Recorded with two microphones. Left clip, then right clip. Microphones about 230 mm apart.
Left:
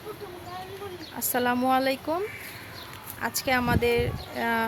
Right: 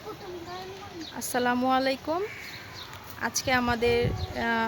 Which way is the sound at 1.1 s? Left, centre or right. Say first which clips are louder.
Left 1 dB; centre.